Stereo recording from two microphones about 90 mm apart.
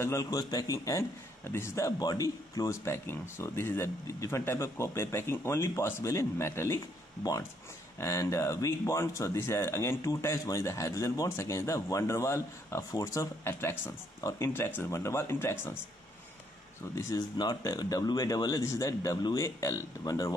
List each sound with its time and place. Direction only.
0.0 s speech: 35° left (ahead or behind)
8.0 s speech: 30° left (ahead or behind)
16.9 s speech: 45° left (ahead or behind)